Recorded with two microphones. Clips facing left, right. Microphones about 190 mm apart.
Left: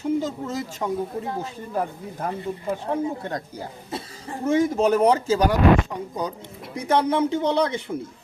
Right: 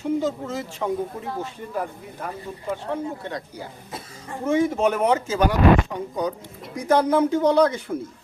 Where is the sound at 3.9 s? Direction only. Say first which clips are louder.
Left 3 dB; 30° left (ahead or behind).